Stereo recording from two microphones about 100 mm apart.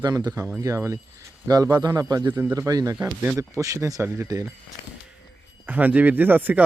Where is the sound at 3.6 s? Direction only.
35° right (ahead or behind).